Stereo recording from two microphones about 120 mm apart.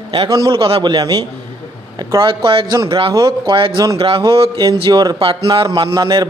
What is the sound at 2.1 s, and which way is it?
A man's voice, 45° right (ahead or behind).